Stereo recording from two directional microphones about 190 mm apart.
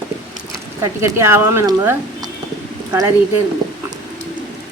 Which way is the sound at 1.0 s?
15° right (ahead or behind).